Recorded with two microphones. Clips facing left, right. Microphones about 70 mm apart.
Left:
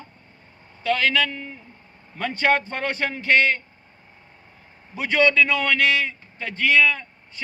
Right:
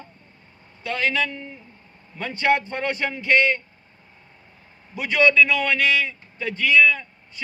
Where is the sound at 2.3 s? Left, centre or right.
Left.